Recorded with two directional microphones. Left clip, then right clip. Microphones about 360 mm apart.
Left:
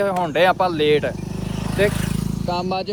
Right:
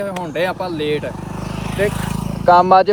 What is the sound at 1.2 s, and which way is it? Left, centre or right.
Vehicle, centre.